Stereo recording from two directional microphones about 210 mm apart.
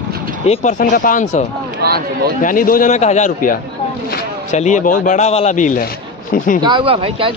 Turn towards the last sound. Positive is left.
turn(degrees=-25)  # may be behind; listen again after turning